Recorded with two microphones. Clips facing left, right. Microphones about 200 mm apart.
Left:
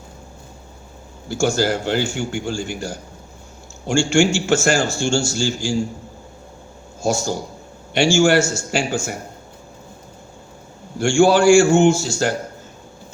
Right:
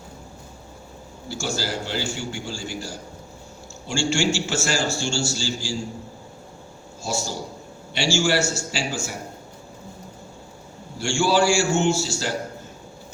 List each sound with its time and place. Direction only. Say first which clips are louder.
1.3 s a man's voice: left 9 dB; 50° left (ahead or behind)
7.0 s a man's voice: left 7 dB; 50° left (ahead or behind)
10.9 s a man's voice: left 7 dB; 50° left (ahead or behind)